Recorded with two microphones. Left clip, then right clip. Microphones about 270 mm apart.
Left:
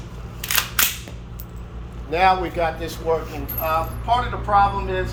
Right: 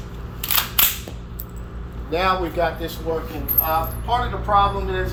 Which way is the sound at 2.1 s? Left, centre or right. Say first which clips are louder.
Left 3 dB; centre.